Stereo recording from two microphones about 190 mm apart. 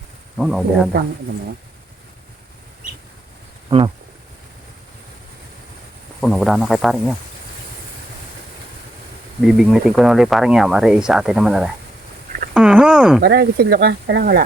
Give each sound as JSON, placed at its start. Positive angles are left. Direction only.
{"t": 0.3, "sound": "speech", "side_deg": 0}
{"t": 3.7, "sound": "speech", "side_deg": -30}
{"t": 6.1, "sound": "speech", "side_deg": 0}
{"t": 9.4, "sound": "speech", "side_deg": 0}
{"t": 13.2, "sound": "speech", "side_deg": -55}